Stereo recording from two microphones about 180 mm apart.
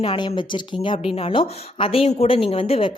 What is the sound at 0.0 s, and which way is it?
A woman's voice, 30° left (ahead or behind).